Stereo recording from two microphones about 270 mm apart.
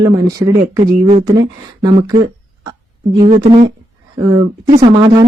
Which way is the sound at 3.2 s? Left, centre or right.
Right.